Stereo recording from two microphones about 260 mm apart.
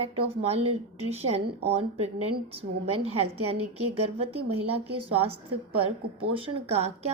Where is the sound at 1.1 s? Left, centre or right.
Right.